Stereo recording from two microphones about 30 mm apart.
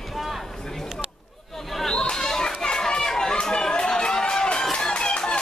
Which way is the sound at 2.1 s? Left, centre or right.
Centre.